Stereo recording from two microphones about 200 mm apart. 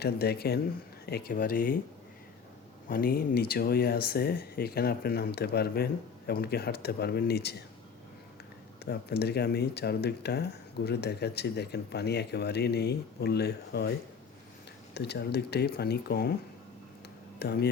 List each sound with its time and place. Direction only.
0.0 s speech: 55° left (ahead or behind)
2.9 s speech: 45° left (ahead or behind)
8.8 s speech: 55° left (ahead or behind)
14.9 s speech: 55° left (ahead or behind)
17.4 s speech: 55° left (ahead or behind)